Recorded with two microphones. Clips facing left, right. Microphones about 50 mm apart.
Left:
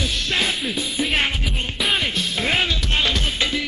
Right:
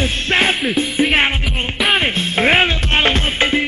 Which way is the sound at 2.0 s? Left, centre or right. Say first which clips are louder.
Right 6 dB; right.